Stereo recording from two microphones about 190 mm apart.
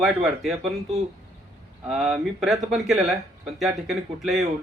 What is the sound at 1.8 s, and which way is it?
Speech, 5° right (ahead or behind).